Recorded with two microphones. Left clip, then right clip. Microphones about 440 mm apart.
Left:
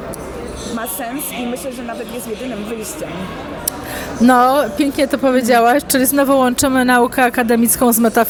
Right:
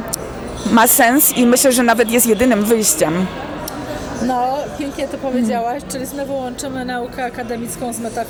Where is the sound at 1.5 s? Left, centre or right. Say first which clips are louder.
Right 12 dB; right.